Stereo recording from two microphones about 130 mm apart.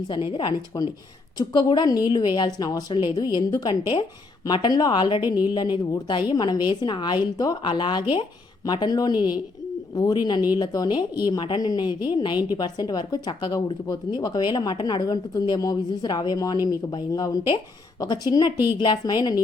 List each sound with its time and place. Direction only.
0.3 s a woman's voice: 35° left (ahead or behind)